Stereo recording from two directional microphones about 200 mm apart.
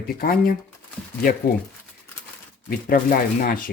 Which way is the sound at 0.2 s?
45° left (ahead or behind).